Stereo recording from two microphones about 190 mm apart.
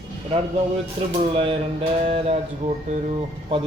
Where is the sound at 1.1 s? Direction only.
30° right (ahead or behind).